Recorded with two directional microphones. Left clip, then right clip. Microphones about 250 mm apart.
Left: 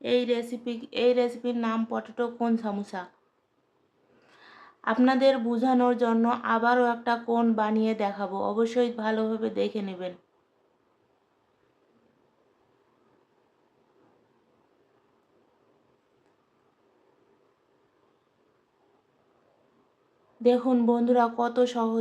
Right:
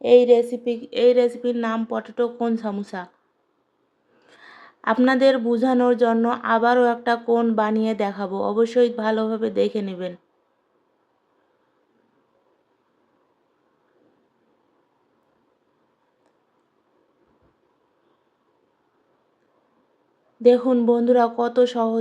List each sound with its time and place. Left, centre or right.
0.0 s speech: centre
4.3 s speech: centre
20.4 s speech: centre